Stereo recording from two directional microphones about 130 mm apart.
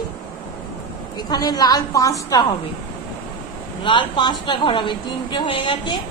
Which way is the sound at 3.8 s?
40° left (ahead or behind).